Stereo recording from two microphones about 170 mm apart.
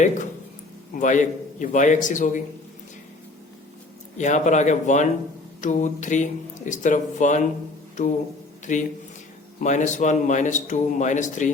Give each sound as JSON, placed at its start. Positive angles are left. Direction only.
{"t": 0.0, "sound": "a man's voice", "side_deg": 45}
{"t": 4.2, "sound": "a man's voice", "side_deg": 45}
{"t": 8.7, "sound": "a man's voice", "side_deg": 45}